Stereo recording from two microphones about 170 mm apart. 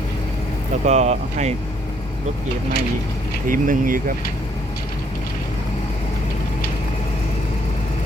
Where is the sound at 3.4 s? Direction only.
55° right (ahead or behind).